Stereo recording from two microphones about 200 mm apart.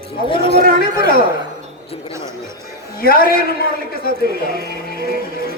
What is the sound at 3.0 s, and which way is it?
Speech, 50° left (ahead or behind).